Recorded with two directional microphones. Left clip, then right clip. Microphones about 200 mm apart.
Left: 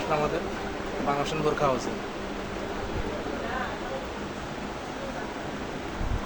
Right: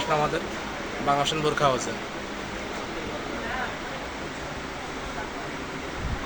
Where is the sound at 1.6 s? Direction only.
10° right (ahead or behind).